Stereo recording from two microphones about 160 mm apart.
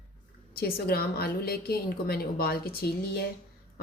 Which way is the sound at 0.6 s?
70° left (ahead or behind).